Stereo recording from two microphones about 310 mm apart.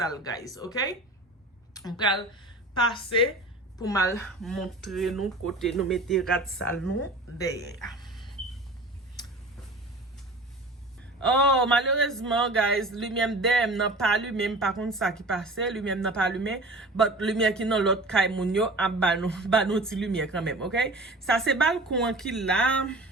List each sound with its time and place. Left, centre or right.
0.0 s a woman's voice: centre
7.9 s a sound: centre
11.2 s speech: centre